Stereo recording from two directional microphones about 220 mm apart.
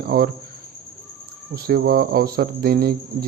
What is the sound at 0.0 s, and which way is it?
Speech, 45° right (ahead or behind).